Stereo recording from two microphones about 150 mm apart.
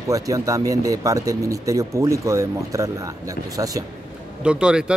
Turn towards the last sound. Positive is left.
turn(degrees=-5)  # may be behind; listen again after turning